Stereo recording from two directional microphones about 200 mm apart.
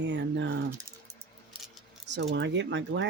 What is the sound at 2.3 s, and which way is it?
Speech, 65° right (ahead or behind).